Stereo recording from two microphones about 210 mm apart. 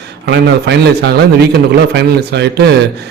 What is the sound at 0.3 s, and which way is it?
A man's voice, 55° right (ahead or behind).